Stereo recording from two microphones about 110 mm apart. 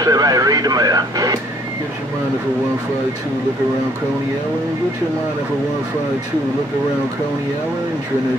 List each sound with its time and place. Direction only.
0.0 s speech: 35° right (ahead or behind)